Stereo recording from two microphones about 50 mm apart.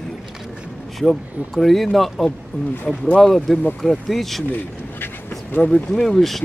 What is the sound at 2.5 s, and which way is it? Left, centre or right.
Speech, left.